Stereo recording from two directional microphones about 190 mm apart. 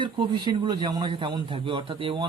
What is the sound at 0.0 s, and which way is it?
A man's voice, 25° right (ahead or behind).